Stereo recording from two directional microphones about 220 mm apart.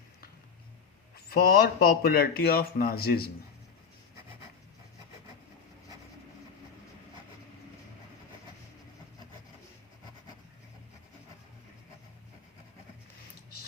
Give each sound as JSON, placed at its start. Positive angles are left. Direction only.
{"t": 1.1, "sound": "speech", "side_deg": 45}